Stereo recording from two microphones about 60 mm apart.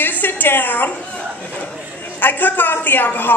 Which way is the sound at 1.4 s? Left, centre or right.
Left.